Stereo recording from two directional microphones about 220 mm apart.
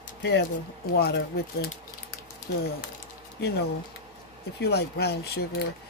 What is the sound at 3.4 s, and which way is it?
Speech, 50° left (ahead or behind).